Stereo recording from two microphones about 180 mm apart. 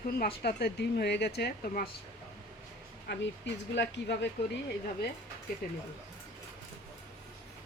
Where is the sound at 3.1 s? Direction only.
75° left (ahead or behind).